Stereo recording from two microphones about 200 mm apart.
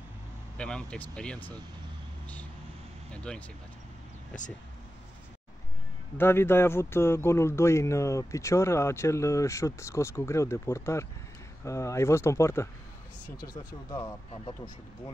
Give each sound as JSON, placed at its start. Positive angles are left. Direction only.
{"t": 0.6, "sound": "speech", "side_deg": 5}
{"t": 3.1, "sound": "speech", "side_deg": 5}
{"t": 6.1, "sound": "speech", "side_deg": 10}